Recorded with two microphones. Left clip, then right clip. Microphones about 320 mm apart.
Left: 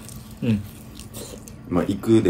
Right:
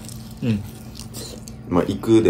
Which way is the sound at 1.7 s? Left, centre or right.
Centre.